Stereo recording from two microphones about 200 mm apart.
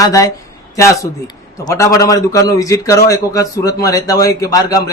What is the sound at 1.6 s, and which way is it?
A man's voice, 15° left (ahead or behind).